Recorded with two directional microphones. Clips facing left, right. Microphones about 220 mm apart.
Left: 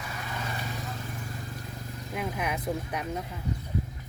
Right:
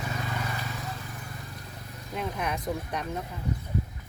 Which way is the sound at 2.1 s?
5° left (ahead or behind).